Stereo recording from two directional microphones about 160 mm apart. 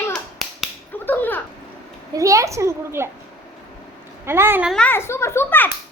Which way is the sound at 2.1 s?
20° right (ahead or behind).